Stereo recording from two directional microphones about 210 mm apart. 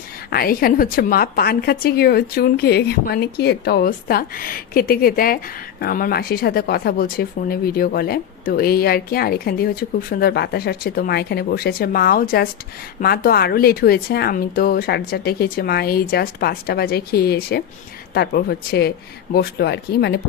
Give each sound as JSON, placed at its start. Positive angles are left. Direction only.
{"t": 0.3, "sound": "a woman's voice", "side_deg": 45}